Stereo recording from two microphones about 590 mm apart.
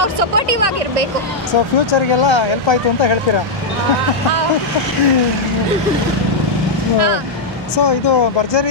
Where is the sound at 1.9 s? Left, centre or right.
Left.